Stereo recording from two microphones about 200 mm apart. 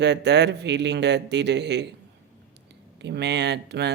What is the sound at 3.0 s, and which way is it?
Speech, 60° right (ahead or behind).